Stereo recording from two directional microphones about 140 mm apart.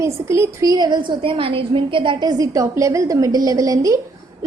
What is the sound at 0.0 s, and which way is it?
A woman's voice, 20° right (ahead or behind).